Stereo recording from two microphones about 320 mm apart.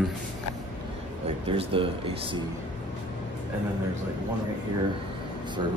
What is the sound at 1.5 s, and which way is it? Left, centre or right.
Speech, centre.